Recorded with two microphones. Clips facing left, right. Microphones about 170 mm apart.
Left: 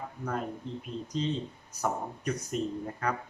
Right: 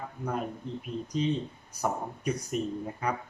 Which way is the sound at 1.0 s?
10° right (ahead or behind).